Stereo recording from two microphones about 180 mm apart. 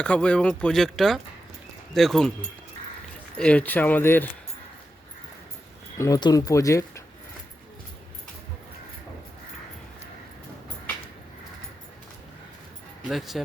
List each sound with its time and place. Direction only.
0.0 s speech: 5° left (ahead or behind)
3.3 s speech: 5° left (ahead or behind)
6.0 s speech: 20° left (ahead or behind)
13.1 s speech: centre (ahead or behind)